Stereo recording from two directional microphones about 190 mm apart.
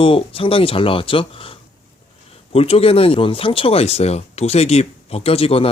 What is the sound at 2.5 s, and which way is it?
Speech, 30° left (ahead or behind).